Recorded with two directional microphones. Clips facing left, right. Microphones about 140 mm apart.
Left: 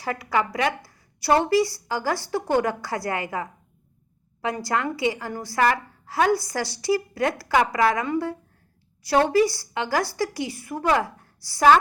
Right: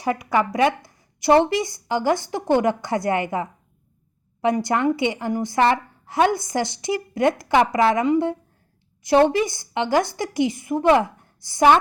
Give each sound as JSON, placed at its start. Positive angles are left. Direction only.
{"t": 0.0, "sound": "a woman's voice", "side_deg": -20}